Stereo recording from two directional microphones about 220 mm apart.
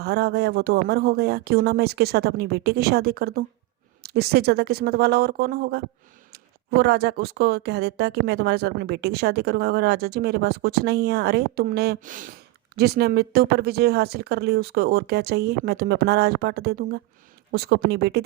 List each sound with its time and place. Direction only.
0.0 s speech: 45° right (ahead or behind)